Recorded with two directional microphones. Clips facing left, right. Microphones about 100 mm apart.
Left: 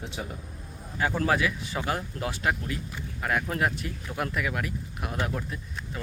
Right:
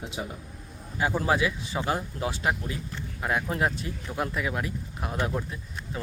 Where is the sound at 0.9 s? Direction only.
15° right (ahead or behind).